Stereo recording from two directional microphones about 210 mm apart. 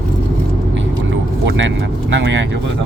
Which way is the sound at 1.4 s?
60° right (ahead or behind).